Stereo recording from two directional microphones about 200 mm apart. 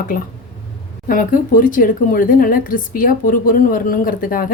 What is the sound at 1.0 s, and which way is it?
A woman's voice, 45° left (ahead or behind).